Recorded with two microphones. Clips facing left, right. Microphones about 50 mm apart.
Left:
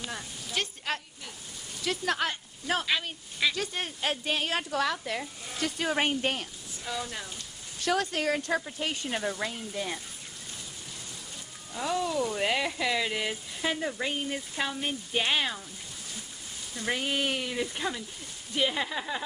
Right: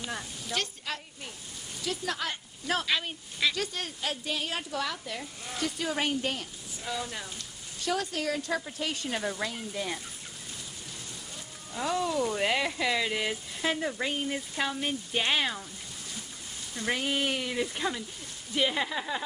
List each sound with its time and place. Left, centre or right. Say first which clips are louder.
0.5 s a sound: even; centre
1.9 s speech: left 4 dB; left
2.6 s speech: even; centre
4.0 s speech: left 4 dB; left
6.8 s speech: even; centre
7.8 s speech: left 3 dB; left
8.7 s speech: left 1 dB; centre
9.1 s speech: left 1 dB; centre
11.7 s speech: even; centre
16.8 s speech: even; centre